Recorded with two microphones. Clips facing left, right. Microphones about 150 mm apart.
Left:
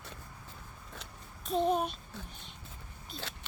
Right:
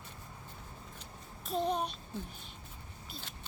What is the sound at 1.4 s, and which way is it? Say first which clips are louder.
Babbling: left 4 dB; centre (ahead or behind).